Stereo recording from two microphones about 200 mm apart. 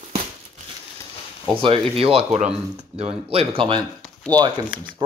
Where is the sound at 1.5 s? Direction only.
25° right (ahead or behind).